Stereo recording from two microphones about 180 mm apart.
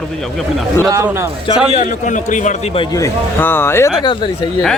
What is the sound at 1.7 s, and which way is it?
Speech, 45° left (ahead or behind).